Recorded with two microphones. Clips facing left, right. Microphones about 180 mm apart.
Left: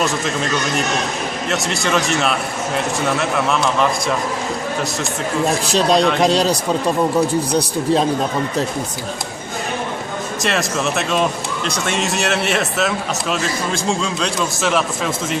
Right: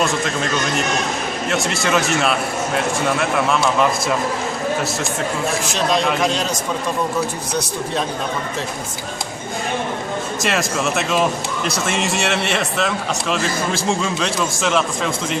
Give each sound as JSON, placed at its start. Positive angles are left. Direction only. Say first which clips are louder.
{"t": 1.5, "sound": "speech", "louder": "right 1 dB", "side_deg": 0}
{"t": 5.5, "sound": "speech", "louder": "left 5 dB", "side_deg": 35}
{"t": 10.4, "sound": "speech", "louder": "left 1 dB", "side_deg": 0}